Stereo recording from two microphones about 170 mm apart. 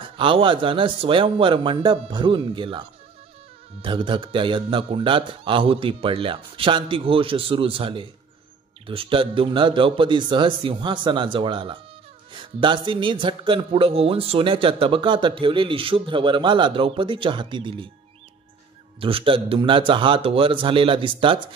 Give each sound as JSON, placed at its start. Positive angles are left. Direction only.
{"t": 0.0, "sound": "speech", "side_deg": -30}
{"t": 3.8, "sound": "a man's voice", "side_deg": -30}
{"t": 18.9, "sound": "a man's voice", "side_deg": -30}